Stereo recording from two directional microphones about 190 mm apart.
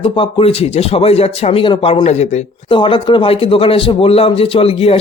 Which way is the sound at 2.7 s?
25° left (ahead or behind).